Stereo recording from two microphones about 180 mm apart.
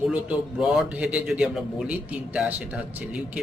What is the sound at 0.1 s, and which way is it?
A man's voice, 5° right (ahead or behind).